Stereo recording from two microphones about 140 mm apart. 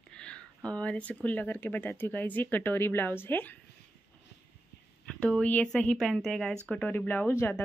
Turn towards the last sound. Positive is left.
turn(degrees=15)  # may be behind; listen again after turning